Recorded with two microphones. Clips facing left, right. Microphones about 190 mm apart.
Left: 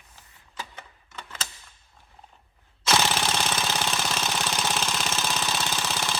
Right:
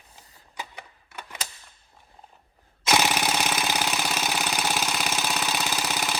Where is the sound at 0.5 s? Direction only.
15° right (ahead or behind).